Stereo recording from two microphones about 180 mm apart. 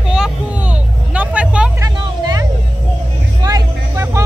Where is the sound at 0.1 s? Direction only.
5° right (ahead or behind).